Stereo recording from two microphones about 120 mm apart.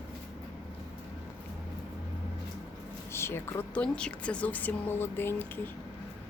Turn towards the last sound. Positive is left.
turn(degrees=15)  # may be behind; listen again after turning